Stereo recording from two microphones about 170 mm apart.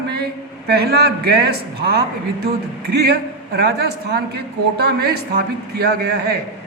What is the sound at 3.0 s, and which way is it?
A man's voice, 65° right (ahead or behind).